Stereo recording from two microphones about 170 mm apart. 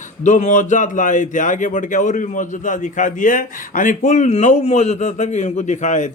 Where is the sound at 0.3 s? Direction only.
45° left (ahead or behind).